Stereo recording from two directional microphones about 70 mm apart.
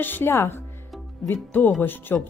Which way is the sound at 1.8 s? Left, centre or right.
Left.